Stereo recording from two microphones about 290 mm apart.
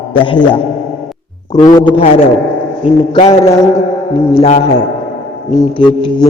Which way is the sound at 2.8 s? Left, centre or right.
Centre.